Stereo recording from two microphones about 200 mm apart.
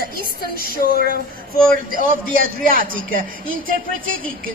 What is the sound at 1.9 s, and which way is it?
A man's voice, 45° right (ahead or behind).